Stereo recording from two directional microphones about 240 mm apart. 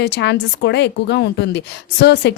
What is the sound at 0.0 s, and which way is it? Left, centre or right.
A woman's voice, left.